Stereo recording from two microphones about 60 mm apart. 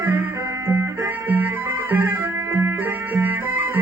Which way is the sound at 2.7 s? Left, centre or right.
Right.